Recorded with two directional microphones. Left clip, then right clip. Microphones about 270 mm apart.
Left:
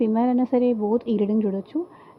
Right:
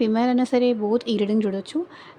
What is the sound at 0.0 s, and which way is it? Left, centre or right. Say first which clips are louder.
A woman's voice: right 1 dB; centre.